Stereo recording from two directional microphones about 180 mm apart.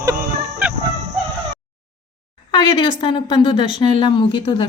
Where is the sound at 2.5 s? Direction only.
25° left (ahead or behind).